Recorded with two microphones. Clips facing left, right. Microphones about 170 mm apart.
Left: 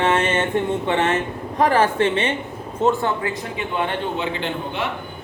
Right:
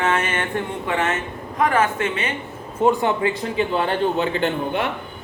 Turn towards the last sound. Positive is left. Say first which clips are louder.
# right 4 dB
turn(degrees=-45)  # may be behind; listen again after turning